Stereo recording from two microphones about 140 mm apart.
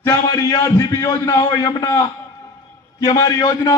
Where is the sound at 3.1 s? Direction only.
30° left (ahead or behind).